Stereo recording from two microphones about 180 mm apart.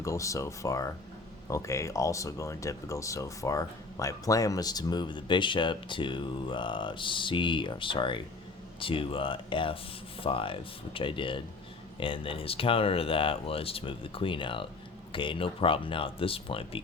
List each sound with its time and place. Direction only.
0.0 s speech: 15° left (ahead or behind)